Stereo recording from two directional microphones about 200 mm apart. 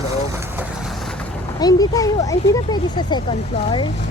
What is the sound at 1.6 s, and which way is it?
Speech, 20° left (ahead or behind).